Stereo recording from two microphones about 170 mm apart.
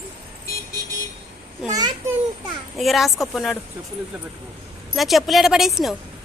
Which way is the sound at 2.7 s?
Centre (ahead or behind).